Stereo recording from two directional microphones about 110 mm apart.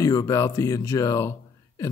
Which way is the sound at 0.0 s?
30° left (ahead or behind).